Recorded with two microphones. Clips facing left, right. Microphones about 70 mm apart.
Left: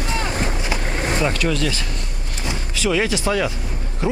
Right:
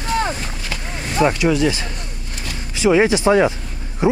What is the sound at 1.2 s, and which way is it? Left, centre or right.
Speech, centre.